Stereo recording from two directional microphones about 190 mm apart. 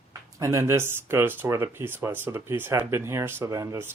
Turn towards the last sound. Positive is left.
turn(degrees=-15)  # may be behind; listen again after turning